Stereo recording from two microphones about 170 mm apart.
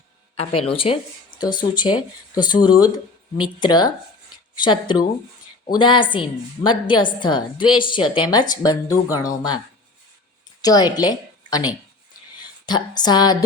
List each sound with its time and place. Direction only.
0.3 s a woman's voice: 35° left (ahead or behind)
10.6 s a woman's voice: 25° left (ahead or behind)
12.6 s a woman's voice: 25° left (ahead or behind)